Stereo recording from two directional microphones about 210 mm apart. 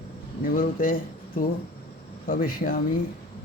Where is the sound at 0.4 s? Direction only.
40° left (ahead or behind).